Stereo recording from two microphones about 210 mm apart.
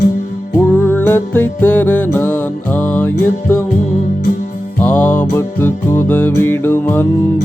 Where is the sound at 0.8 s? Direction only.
10° left (ahead or behind).